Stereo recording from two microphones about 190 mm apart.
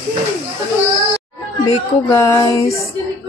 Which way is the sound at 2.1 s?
15° left (ahead or behind).